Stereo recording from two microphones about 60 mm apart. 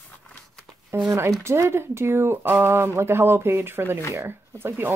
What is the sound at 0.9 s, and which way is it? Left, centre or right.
Speech, right.